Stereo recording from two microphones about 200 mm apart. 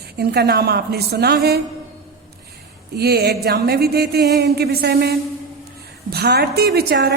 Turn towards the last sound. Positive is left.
turn(degrees=-55)  # may be behind; listen again after turning